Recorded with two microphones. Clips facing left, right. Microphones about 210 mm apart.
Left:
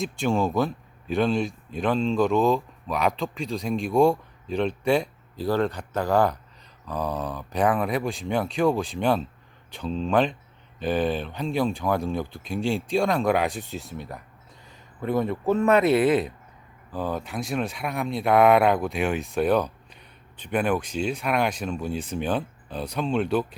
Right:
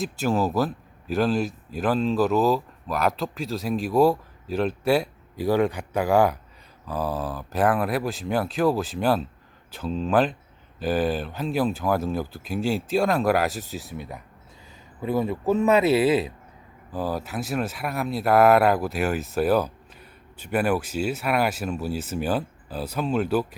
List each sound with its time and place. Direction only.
0.0 s speech: centre (ahead or behind)
15.8 s speech: 30° right (ahead or behind)
16.9 s speech: 5° right (ahead or behind)